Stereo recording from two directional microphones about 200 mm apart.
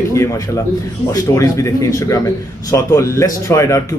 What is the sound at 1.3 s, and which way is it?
A man's voice, 15° left (ahead or behind).